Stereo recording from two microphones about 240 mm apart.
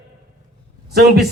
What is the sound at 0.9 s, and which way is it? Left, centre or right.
Speech, right.